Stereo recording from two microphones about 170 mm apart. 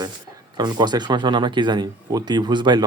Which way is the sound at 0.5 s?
25° right (ahead or behind).